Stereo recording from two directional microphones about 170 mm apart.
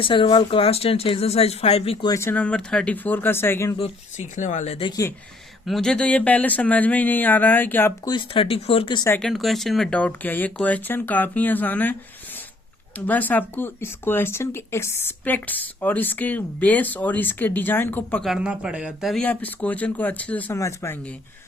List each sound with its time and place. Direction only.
0.0 s speech: 30° left (ahead or behind)
2.0 s speech: 15° left (ahead or behind)
3.8 s speech: 40° left (ahead or behind)
4.9 s speech: 20° left (ahead or behind)
5.6 s speech: centre (ahead or behind)
8.0 s speech: 30° left (ahead or behind)
9.0 s speech: 10° left (ahead or behind)
9.3 s speech: centre (ahead or behind)
13.1 s speech: 10° left (ahead or behind)
18.3 s speech: 5° right (ahead or behind); by 21.0 s 15° left (ahead or behind)